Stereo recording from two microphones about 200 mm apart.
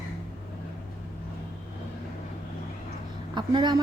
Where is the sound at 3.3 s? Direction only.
20° right (ahead or behind).